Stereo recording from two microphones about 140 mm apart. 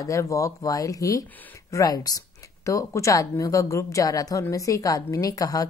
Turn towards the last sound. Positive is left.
turn(degrees=25)  # may be behind; listen again after turning